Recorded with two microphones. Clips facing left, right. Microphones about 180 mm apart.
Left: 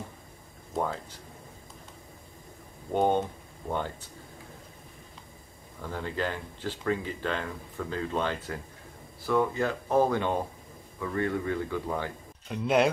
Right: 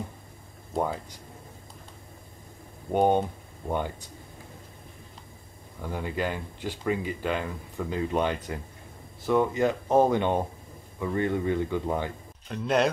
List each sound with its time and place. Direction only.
2.9 s speech: 15° right (ahead or behind)
5.8 s speech: 15° right (ahead or behind)
12.4 s a man's voice: 5° left (ahead or behind)